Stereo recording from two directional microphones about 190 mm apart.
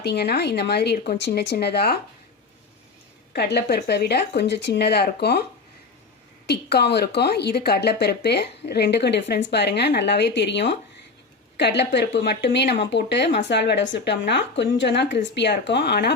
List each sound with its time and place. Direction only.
0.0 s speech: 60° left (ahead or behind)
3.3 s speech: 60° left (ahead or behind)
6.5 s speech: 60° left (ahead or behind)